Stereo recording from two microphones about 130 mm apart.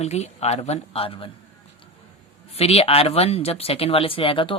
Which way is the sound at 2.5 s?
50° left (ahead or behind).